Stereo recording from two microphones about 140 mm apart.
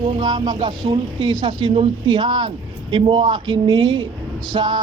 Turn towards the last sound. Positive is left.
turn(degrees=-35)  # may be behind; listen again after turning